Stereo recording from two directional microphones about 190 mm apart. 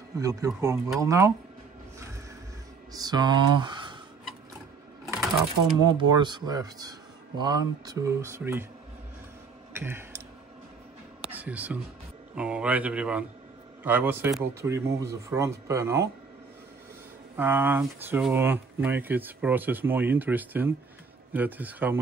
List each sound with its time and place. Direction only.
0.2 s speech: 15° right (ahead or behind)
2.9 s speech: 20° right (ahead or behind)
5.8 s speech: 20° right (ahead or behind)
9.8 s a sound: 10° right (ahead or behind)
11.2 s speech: 10° right (ahead or behind)
17.4 s speech: 10° right (ahead or behind)